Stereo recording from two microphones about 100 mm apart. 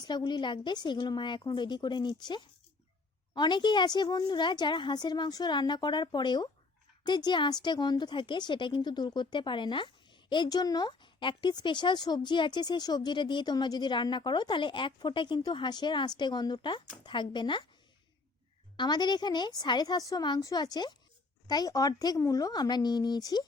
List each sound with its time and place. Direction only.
0.0 s speech: 50° left (ahead or behind)
18.8 s speech: 45° left (ahead or behind)